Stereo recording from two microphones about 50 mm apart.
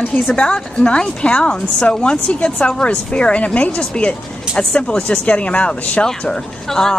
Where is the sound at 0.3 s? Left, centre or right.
Centre.